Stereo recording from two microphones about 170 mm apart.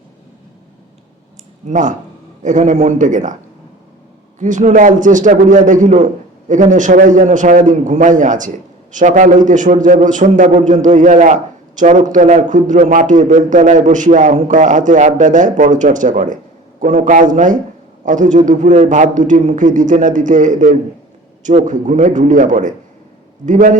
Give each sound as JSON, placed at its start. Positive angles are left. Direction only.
{"t": 1.6, "sound": "a man's voice", "side_deg": -45}
{"t": 4.4, "sound": "a man's voice", "side_deg": -50}